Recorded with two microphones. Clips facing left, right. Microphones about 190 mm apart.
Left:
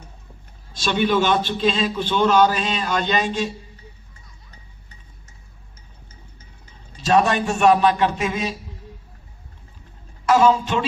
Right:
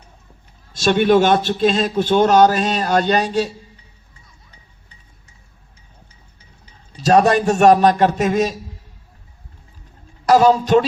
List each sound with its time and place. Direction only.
0.8 s a man's voice: 50° right (ahead or behind)
6.9 s a man's voice: 40° right (ahead or behind)
10.2 s speech: 40° right (ahead or behind)